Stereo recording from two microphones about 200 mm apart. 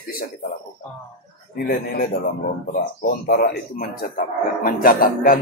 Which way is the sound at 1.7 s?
50° left (ahead or behind).